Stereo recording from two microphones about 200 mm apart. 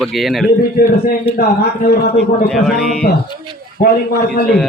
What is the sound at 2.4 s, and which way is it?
Speech, centre (ahead or behind).